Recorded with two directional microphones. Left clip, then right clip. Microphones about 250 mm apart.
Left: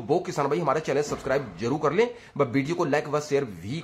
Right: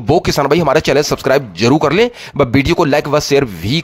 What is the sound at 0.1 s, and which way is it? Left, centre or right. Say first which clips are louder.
Speech: right 13 dB; right.